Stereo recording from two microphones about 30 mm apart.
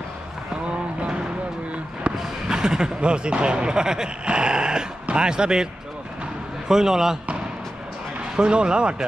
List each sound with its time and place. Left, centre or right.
2.1 s basketball bounce: right
2.5 s speech: right
6.7 s speech: centre
8.4 s speech: right